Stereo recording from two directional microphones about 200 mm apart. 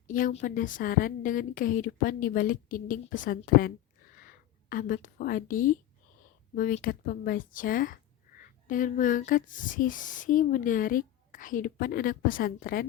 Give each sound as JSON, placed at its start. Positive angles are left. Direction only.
{"t": 0.1, "sound": "speech", "side_deg": 40}